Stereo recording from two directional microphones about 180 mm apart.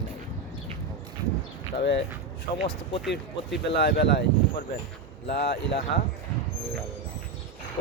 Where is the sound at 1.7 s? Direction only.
75° left (ahead or behind).